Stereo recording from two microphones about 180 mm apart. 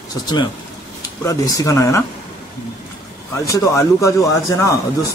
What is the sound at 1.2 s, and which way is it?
Speech, 20° left (ahead or behind).